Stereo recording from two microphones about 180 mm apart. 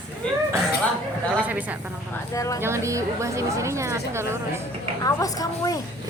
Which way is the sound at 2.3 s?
20° left (ahead or behind).